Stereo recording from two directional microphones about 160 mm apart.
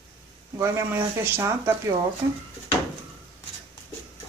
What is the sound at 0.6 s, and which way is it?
Speech, 15° right (ahead or behind).